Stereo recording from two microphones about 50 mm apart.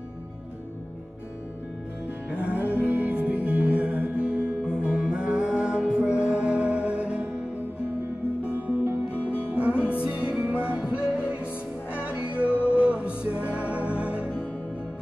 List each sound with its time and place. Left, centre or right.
2.3 s music: right
8.5 s music: right
9.1 s music: left
9.5 s music: right